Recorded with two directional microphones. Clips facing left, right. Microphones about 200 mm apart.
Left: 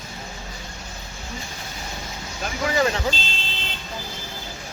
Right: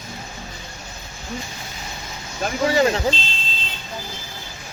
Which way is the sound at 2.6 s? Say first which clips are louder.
Right 4 dB; 30° right (ahead or behind).